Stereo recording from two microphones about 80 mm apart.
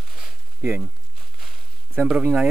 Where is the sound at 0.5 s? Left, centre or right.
Right.